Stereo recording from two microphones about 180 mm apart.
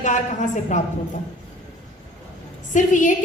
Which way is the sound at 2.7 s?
45° left (ahead or behind).